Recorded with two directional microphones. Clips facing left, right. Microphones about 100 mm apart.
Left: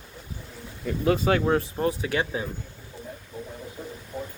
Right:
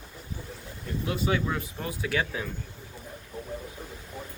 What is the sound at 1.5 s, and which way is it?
Speech, 40° left (ahead or behind).